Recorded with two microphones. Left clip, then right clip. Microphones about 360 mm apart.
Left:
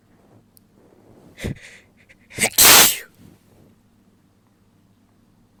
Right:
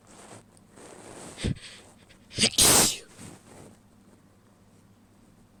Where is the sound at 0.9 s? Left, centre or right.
Right.